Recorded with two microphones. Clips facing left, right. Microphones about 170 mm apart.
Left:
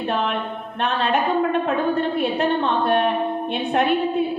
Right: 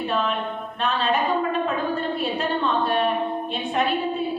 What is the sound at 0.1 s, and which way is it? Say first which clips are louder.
A woman's voice: left 3 dB; 60° left (ahead or behind).